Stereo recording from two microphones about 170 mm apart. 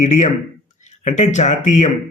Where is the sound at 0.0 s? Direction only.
45° left (ahead or behind).